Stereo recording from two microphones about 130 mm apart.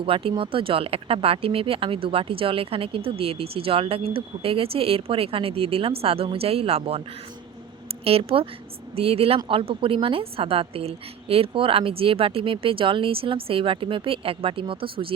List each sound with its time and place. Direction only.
0.0 s speech: 45° right (ahead or behind)
8.0 s speech: 50° right (ahead or behind)